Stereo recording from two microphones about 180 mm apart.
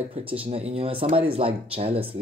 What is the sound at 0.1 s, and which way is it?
Speech, 30° right (ahead or behind).